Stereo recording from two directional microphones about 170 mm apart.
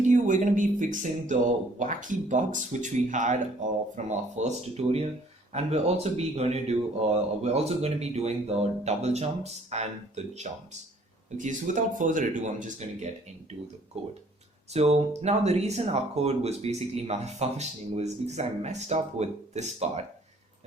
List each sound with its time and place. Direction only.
0.1 s speech: 50° right (ahead or behind)
11.3 s speech: 50° right (ahead or behind)